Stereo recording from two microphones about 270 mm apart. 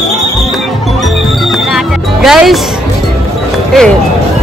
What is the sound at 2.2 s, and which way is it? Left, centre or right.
Speech, centre.